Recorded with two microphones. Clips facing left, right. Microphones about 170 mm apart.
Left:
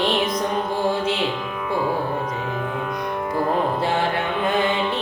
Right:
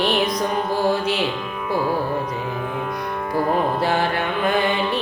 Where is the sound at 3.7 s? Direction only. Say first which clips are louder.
Right 1 dB; 25° left (ahead or behind).